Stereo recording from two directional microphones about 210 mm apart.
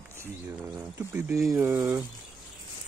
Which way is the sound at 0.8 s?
10° right (ahead or behind).